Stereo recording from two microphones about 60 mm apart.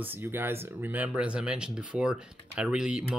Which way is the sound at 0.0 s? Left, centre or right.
Right.